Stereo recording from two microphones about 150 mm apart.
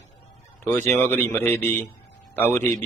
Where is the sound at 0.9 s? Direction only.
15° left (ahead or behind).